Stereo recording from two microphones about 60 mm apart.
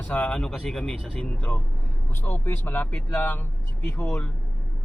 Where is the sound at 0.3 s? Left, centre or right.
Centre.